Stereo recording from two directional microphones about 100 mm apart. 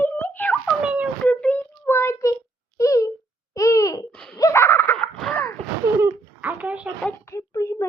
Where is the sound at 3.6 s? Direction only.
30° left (ahead or behind).